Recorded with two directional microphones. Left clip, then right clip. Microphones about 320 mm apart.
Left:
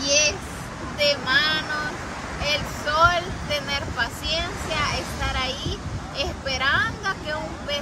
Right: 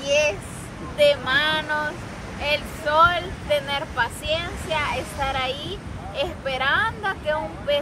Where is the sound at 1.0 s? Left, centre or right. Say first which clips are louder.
Right 2 dB; right.